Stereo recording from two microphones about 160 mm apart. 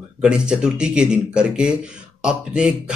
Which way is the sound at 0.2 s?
5° right (ahead or behind).